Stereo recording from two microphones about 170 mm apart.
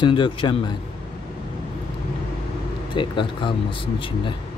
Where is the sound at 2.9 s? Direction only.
30° left (ahead or behind).